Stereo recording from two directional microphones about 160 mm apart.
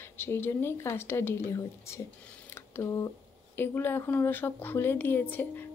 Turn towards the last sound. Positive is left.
turn(degrees=10)  # may be behind; listen again after turning